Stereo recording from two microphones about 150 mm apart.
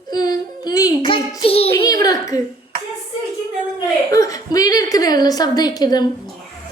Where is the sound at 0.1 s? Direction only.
25° left (ahead or behind).